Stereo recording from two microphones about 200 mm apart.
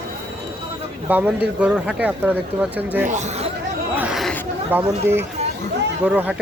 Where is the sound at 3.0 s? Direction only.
35° right (ahead or behind).